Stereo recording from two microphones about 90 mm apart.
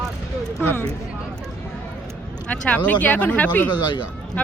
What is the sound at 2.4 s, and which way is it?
Speech, 15° left (ahead or behind).